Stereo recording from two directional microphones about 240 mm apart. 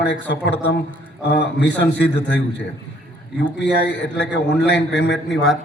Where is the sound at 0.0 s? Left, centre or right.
Left.